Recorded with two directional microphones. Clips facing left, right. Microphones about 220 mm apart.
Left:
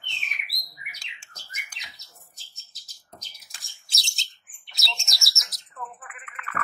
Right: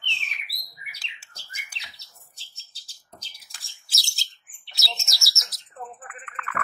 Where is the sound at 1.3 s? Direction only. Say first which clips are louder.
Left 4 dB; 30° right (ahead or behind).